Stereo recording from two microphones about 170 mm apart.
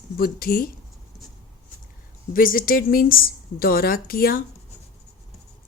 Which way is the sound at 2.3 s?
55° left (ahead or behind).